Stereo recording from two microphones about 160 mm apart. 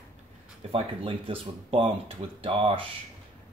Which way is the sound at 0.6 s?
35° right (ahead or behind).